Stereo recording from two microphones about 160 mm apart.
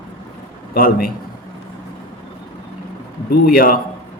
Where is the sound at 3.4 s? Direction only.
65° left (ahead or behind).